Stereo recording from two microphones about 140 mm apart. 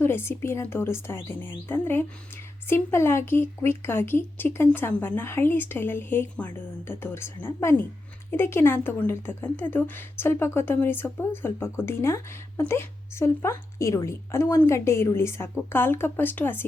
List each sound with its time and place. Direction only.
0.0 s a woman's voice: 15° left (ahead or behind)